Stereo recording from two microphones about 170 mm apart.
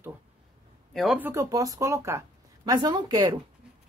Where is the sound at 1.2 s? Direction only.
15° right (ahead or behind).